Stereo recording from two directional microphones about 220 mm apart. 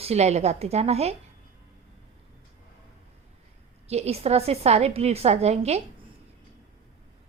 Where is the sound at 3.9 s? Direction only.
30° right (ahead or behind).